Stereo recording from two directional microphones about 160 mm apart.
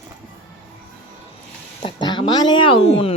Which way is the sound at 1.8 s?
30° left (ahead or behind).